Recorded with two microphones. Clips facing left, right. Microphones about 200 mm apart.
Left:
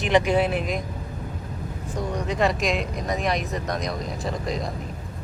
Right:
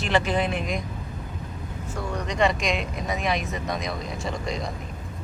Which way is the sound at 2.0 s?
10° left (ahead or behind).